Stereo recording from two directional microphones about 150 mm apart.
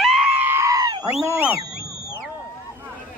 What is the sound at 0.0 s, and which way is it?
Goat, 5° right (ahead or behind).